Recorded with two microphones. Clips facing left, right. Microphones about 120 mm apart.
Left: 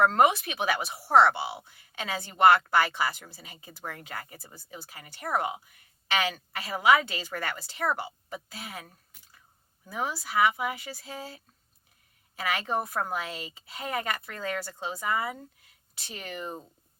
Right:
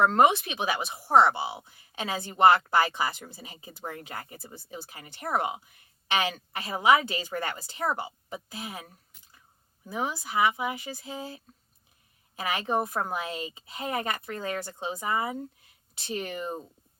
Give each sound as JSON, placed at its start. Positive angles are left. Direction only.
{"t": 0.3, "sound": "a woman's voice", "side_deg": -20}
{"t": 9.8, "sound": "a woman's voice", "side_deg": -20}